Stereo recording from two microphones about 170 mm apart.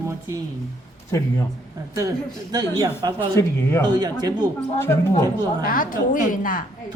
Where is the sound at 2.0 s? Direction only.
20° right (ahead or behind).